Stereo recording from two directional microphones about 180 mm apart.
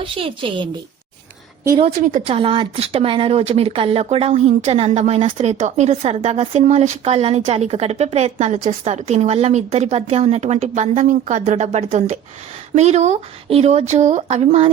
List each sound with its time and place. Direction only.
0.0 s a woman's voice: 30° right (ahead or behind)
1.8 s speech: 40° right (ahead or behind)